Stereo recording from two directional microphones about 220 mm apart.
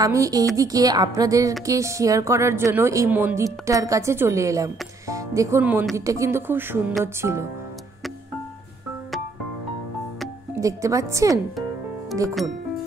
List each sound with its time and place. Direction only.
0.0 s a woman's voice: 15° right (ahead or behind)
10.6 s a woman's voice: 15° right (ahead or behind)